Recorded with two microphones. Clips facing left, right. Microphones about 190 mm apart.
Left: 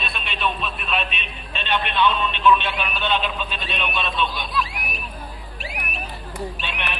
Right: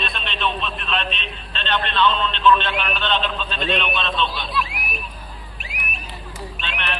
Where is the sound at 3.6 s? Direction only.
10° left (ahead or behind).